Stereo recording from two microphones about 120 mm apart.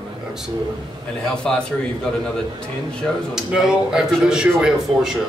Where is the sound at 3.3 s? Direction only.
5° right (ahead or behind).